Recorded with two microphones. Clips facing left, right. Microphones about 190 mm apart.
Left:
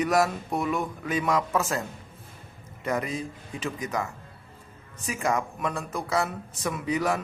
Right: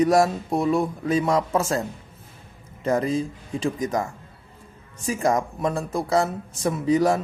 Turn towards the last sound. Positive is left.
turn(degrees=-30)  # may be behind; listen again after turning